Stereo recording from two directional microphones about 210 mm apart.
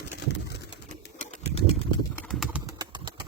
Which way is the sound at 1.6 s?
30° left (ahead or behind).